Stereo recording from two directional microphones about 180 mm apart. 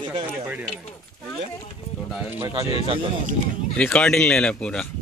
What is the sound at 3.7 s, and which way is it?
Speech, 5° left (ahead or behind).